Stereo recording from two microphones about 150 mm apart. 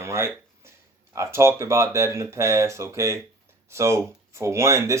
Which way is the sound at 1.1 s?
15° right (ahead or behind).